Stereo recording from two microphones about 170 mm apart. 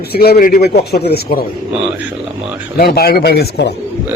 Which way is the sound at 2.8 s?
65° left (ahead or behind).